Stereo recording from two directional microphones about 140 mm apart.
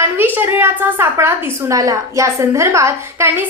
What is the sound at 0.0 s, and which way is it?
A woman's voice, 15° right (ahead or behind).